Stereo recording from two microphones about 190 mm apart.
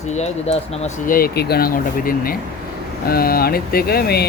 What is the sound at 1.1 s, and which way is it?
Speech, 55° left (ahead or behind).